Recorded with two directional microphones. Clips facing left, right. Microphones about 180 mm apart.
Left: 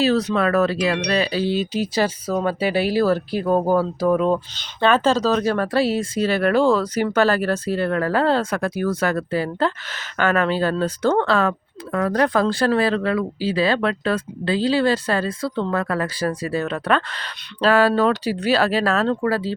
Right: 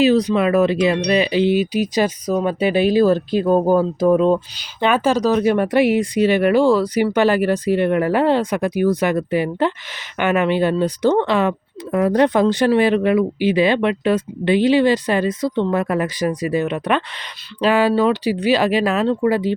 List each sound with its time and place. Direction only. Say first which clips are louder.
0.0 s speech: right 4 dB; 15° right (ahead or behind)